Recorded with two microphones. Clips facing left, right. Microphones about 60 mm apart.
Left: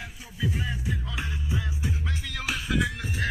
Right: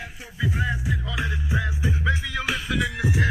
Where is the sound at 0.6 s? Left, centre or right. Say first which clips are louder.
Right 5 dB; right.